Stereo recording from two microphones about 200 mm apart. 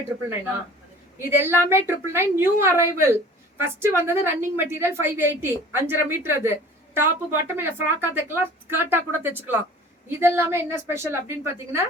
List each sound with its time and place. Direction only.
1.2 s a woman's voice: 10° right (ahead or behind)